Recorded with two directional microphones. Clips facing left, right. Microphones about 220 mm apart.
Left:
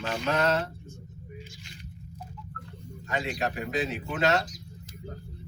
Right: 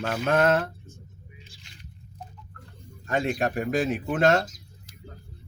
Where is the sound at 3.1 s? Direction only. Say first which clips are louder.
Right 5 dB; 50° right (ahead or behind).